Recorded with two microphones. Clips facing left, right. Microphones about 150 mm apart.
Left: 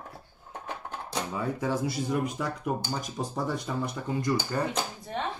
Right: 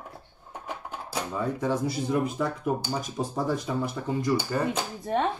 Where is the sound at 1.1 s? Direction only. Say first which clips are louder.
Right 2 dB; centre (ahead or behind).